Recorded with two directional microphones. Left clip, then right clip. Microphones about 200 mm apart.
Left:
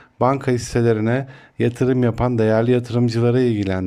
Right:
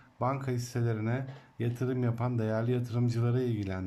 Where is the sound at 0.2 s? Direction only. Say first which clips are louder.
Left 15 dB; 40° left (ahead or behind).